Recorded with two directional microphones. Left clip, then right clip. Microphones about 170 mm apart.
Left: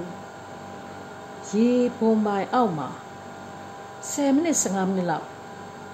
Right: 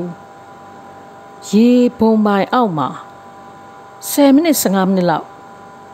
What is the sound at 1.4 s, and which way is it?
Speech, 70° right (ahead or behind).